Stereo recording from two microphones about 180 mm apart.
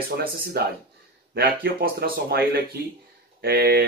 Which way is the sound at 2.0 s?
60° right (ahead or behind).